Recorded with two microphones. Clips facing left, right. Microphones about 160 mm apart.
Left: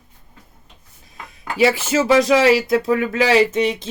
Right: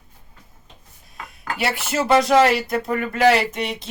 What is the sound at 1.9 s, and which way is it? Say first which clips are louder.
Speech: right 2 dB; 90° left.